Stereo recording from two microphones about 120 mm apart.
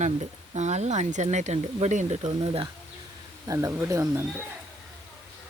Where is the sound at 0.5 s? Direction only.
70° right (ahead or behind).